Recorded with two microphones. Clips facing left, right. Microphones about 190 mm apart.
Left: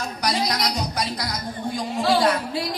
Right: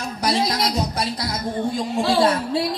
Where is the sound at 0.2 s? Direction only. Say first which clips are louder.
Right 3 dB; 25° right (ahead or behind).